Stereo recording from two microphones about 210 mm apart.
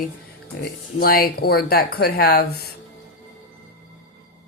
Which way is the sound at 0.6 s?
45° left (ahead or behind).